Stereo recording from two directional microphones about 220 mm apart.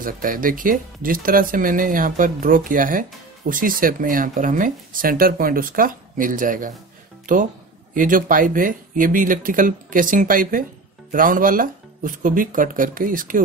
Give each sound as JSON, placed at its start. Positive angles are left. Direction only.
{"t": 0.0, "sound": "speech", "side_deg": -40}